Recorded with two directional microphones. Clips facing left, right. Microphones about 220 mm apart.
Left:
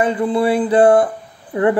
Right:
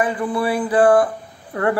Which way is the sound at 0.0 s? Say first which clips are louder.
Left 4 dB; 25° left (ahead or behind).